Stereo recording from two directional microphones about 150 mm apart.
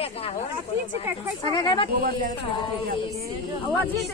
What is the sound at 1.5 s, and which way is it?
Speech, 30° left (ahead or behind).